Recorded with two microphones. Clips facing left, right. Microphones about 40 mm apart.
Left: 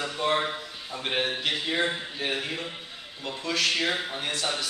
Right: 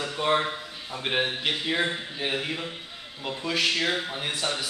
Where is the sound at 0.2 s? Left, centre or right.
Centre.